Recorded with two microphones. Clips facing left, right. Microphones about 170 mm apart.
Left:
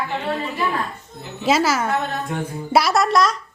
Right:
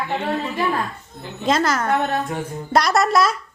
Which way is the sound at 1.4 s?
5° left (ahead or behind).